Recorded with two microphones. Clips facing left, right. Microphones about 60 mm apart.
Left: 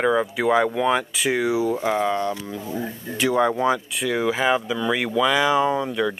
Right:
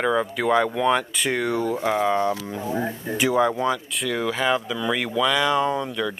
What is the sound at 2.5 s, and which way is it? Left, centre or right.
Speech, right.